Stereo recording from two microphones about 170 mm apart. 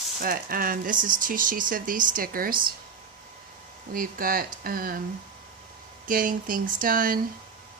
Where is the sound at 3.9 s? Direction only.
55° right (ahead or behind).